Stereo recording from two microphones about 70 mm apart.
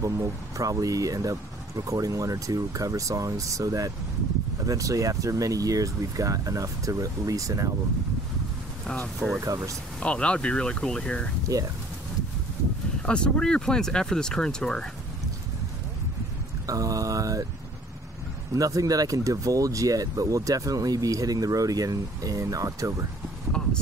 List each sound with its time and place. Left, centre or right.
0.0 s speech: right
8.8 s speech: centre
9.4 s speech: right
9.9 s speech: centre
13.0 s speech: centre
16.6 s speech: right
18.5 s speech: right